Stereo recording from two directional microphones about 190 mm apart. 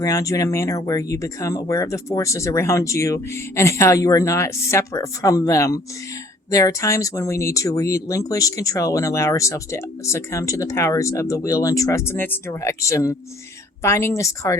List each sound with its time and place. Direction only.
0.0 s speech: 20° left (ahead or behind)